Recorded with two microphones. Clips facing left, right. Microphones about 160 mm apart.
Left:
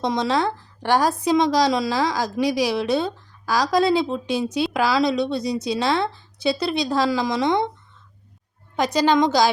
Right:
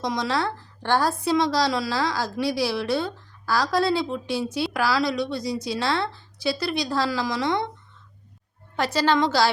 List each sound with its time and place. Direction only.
0.0 s a woman's voice: 25° left (ahead or behind)
8.7 s a woman's voice: 15° left (ahead or behind)